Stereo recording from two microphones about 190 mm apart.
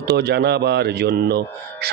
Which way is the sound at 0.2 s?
60° right (ahead or behind).